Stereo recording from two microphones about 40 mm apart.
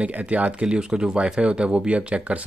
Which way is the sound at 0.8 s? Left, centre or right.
Centre.